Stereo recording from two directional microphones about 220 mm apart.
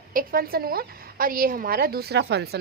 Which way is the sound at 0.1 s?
40° right (ahead or behind).